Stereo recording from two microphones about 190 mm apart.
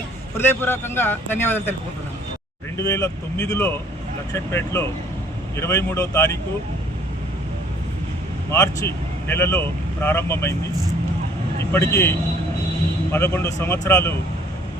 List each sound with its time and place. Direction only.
0.3 s speech: 10° left (ahead or behind)
2.7 s speech: 15° left (ahead or behind)
8.4 s speech: 15° left (ahead or behind)
11.7 s speech: 15° left (ahead or behind)